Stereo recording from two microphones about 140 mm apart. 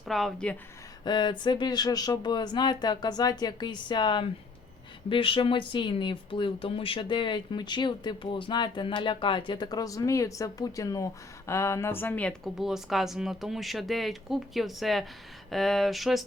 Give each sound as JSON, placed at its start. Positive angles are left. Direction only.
{"t": 0.0, "sound": "speech", "side_deg": 0}
{"t": 1.0, "sound": "speech", "side_deg": 30}
{"t": 12.5, "sound": "speech", "side_deg": 0}